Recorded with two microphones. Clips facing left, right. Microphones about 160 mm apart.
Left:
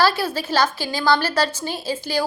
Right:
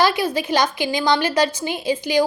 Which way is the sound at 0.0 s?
15° right (ahead or behind).